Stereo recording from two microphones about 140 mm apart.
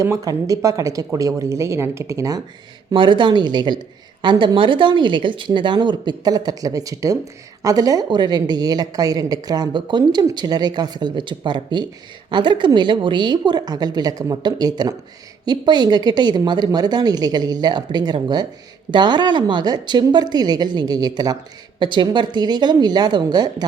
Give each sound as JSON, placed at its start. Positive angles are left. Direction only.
{"t": 0.0, "sound": "a woman's voice", "side_deg": -25}
{"t": 2.9, "sound": "a woman's voice", "side_deg": -35}